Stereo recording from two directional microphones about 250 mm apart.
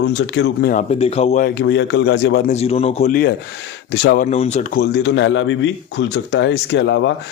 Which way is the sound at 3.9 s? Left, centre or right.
Left.